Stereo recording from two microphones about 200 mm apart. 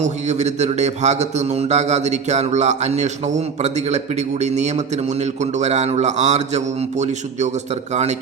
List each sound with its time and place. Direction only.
0.0 s speech: 35° right (ahead or behind)